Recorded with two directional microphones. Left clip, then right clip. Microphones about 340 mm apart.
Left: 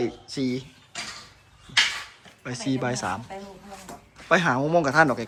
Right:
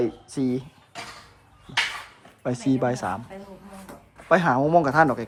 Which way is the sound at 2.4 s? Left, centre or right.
Centre.